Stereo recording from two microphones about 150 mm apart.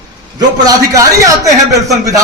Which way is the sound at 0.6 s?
20° right (ahead or behind).